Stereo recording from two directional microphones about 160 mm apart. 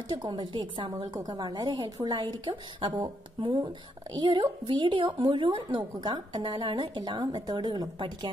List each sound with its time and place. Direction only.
0.1 s a woman's voice: 30° right (ahead or behind)